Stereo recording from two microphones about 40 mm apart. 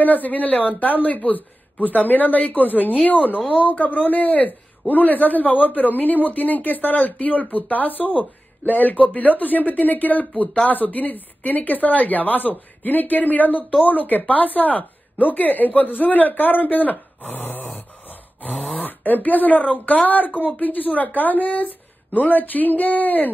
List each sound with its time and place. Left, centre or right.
0.0 s a man's voice: left
17.3 s a man's voice: left
17.7 s a sound: left
18.8 s a man's voice: left